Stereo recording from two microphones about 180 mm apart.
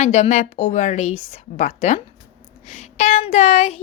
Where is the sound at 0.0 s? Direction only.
40° left (ahead or behind).